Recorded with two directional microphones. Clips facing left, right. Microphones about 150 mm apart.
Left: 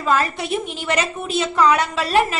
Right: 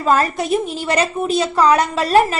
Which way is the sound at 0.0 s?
45° right (ahead or behind).